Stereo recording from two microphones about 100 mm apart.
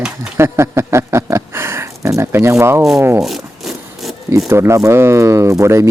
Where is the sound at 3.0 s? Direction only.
25° right (ahead or behind).